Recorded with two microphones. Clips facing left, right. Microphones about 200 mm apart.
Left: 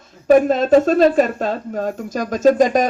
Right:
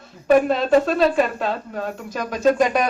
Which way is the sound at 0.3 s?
45° left (ahead or behind).